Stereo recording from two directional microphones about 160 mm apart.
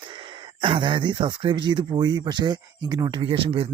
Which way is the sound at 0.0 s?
30° right (ahead or behind).